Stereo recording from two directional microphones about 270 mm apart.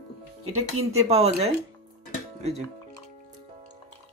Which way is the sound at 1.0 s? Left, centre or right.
Right.